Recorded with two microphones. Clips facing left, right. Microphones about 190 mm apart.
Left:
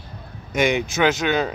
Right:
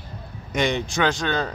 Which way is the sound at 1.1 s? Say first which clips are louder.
Left 4 dB; 10° left (ahead or behind).